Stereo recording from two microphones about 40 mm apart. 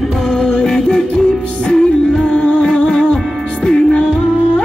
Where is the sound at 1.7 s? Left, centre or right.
Left.